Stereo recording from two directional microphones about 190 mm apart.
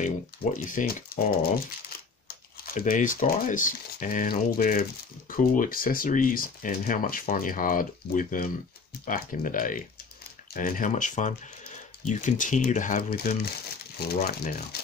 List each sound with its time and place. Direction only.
0.0 s speech: 45° left (ahead or behind)